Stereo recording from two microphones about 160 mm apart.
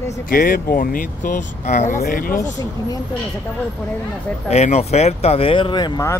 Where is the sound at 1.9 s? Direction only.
65° left (ahead or behind).